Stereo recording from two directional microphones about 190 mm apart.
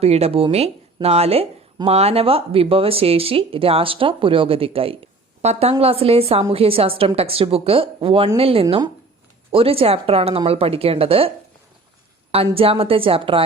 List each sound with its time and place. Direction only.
0.0 s a woman's voice: 30° right (ahead or behind)
12.5 s a woman's voice: 30° right (ahead or behind)